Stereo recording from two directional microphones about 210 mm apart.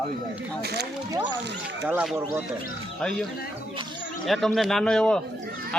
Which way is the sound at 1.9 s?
5° right (ahead or behind).